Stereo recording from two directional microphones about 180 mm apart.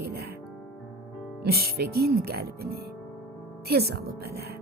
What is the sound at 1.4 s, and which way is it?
Speech, 60° right (ahead or behind).